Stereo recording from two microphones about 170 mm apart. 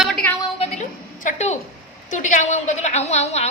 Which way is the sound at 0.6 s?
40° left (ahead or behind).